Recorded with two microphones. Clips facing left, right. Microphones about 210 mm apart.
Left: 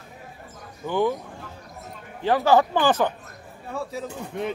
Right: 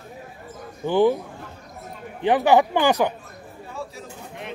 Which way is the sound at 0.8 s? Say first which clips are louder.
Right 5 dB; 30° right (ahead or behind).